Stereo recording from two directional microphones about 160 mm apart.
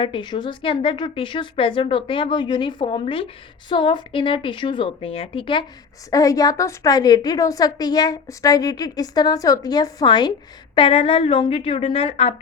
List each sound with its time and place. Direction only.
0.0 s a woman's voice: 30° left (ahead or behind)